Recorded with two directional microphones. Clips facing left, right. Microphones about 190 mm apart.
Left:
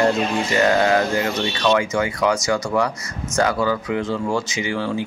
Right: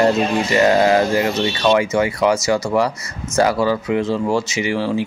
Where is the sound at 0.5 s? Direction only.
25° right (ahead or behind).